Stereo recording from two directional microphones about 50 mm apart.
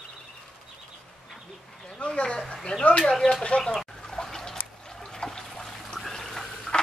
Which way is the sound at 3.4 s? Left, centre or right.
Centre.